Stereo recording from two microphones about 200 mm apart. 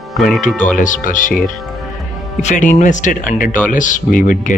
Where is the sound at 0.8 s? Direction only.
40° left (ahead or behind).